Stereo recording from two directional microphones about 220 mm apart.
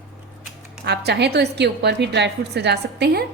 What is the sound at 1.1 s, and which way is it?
A woman's voice, 50° right (ahead or behind).